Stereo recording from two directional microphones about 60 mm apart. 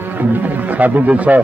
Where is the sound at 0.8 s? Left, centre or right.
Right.